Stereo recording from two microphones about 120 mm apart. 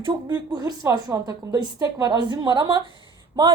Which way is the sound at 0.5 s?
30° right (ahead or behind).